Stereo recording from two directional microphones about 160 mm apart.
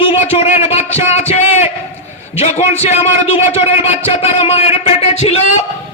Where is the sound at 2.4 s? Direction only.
40° left (ahead or behind).